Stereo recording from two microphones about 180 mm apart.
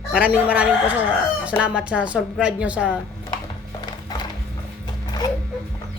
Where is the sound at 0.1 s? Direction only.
5° right (ahead or behind).